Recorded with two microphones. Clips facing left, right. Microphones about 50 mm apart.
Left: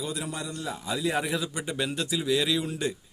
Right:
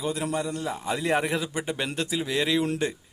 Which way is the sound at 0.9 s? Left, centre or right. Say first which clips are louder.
Right 3 dB; right.